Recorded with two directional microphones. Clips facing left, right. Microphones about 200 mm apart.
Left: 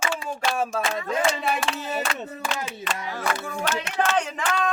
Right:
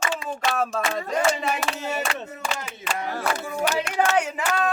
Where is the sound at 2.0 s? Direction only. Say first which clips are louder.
Even; centre (ahead or behind).